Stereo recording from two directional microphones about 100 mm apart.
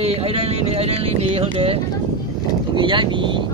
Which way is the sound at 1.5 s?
70° right (ahead or behind).